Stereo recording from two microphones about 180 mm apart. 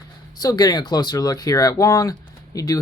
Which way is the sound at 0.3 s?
20° left (ahead or behind).